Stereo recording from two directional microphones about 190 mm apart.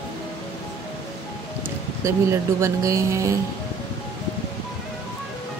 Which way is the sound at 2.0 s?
15° right (ahead or behind).